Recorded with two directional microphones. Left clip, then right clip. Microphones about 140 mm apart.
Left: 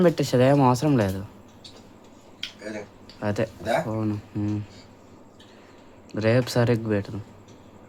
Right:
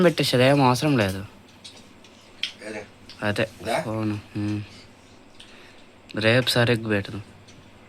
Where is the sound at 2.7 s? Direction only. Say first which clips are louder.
Right 1 dB; centre (ahead or behind).